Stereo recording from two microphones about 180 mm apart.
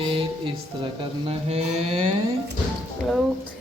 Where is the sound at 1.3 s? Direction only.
35° right (ahead or behind).